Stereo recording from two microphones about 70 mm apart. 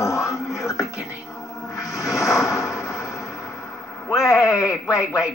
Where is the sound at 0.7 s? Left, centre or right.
Left.